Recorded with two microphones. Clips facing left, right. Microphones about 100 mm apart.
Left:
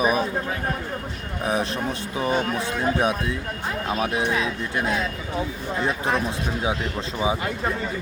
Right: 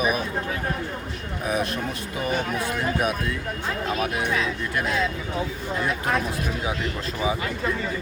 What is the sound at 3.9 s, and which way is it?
Speech, 25° left (ahead or behind).